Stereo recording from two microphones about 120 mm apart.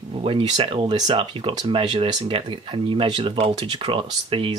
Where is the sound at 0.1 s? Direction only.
50° right (ahead or behind).